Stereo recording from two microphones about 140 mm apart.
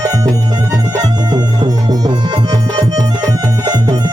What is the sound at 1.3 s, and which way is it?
Music, 30° right (ahead or behind).